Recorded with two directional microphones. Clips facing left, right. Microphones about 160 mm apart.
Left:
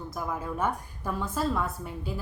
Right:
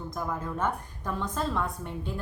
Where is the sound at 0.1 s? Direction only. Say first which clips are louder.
Even; 5° left (ahead or behind).